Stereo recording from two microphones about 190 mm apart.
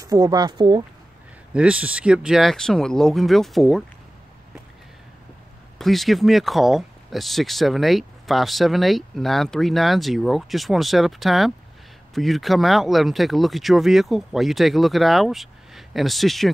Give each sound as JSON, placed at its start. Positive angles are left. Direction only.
{"t": 0.0, "sound": "speech", "side_deg": -20}
{"t": 1.5, "sound": "speech", "side_deg": -5}
{"t": 5.8, "sound": "speech", "side_deg": 0}